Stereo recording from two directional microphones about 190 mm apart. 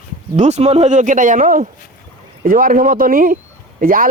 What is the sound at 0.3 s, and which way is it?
Speech, 35° right (ahead or behind).